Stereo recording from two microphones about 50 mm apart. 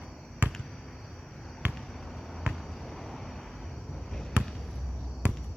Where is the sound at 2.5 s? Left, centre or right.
Centre.